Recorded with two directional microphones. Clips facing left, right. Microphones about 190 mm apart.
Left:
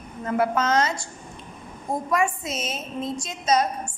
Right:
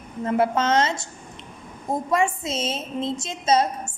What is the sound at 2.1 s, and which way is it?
A woman's voice, 25° right (ahead or behind).